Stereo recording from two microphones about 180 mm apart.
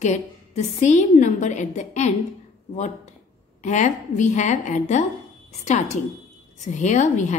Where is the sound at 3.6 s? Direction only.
40° left (ahead or behind).